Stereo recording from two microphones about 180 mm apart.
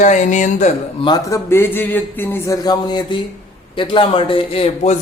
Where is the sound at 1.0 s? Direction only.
20° left (ahead or behind).